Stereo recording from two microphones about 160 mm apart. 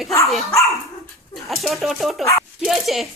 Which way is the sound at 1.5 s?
Centre (ahead or behind).